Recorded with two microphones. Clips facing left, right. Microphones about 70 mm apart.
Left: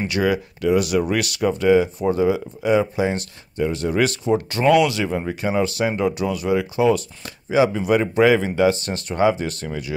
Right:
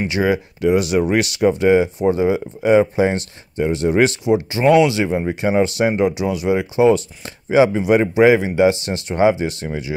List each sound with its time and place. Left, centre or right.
0.0 s speech: right